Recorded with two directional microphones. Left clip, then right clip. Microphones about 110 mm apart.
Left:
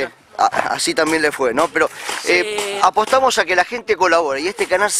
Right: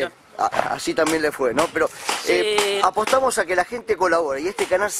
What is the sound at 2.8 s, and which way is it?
Speech, 45° left (ahead or behind).